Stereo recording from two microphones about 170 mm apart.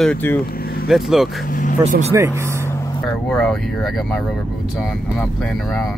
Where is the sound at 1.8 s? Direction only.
40° right (ahead or behind).